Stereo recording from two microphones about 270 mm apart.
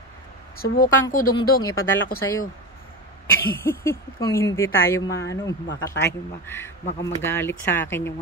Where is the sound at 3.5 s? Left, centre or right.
Centre.